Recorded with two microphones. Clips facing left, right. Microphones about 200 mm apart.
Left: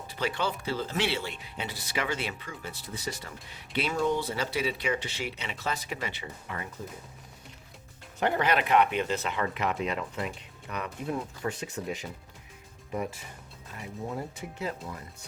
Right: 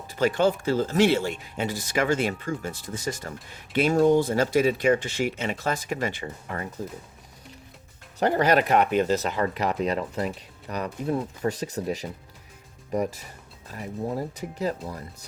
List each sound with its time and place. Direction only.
0.1 s speech: 45° right (ahead or behind)
8.2 s speech: 40° right (ahead or behind)